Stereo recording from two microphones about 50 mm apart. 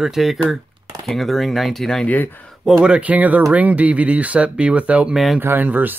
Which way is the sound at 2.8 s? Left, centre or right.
Right.